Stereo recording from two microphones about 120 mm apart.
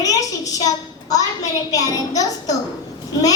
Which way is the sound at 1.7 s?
30° left (ahead or behind).